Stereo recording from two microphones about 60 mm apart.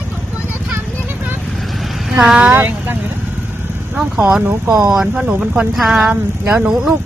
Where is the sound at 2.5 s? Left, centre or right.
Right.